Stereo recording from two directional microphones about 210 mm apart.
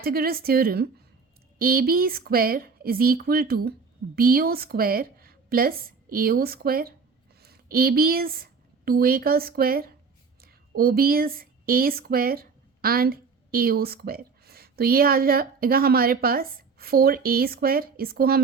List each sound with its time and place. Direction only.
0.0 s a woman's voice: 45° right (ahead or behind)